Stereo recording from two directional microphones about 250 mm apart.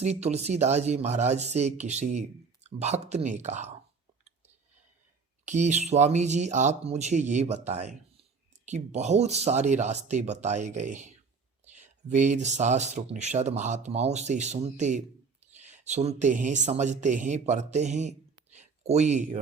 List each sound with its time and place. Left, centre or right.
0.0 s speech: right
5.5 s speech: right
18.5 s a sound: right